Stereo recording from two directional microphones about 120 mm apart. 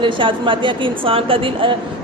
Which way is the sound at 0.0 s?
45° right (ahead or behind).